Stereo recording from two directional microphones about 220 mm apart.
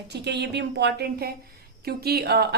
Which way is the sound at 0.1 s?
50° right (ahead or behind).